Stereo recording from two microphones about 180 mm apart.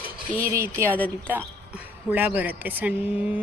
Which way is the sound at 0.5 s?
15° right (ahead or behind).